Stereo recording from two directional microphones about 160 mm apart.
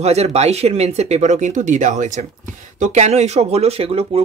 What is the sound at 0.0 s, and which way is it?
Speech, 40° right (ahead or behind).